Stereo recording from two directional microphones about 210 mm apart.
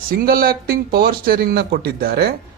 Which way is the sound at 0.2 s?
45° right (ahead or behind).